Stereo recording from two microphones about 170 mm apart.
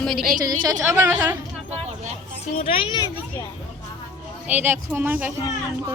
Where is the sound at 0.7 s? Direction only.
15° right (ahead or behind).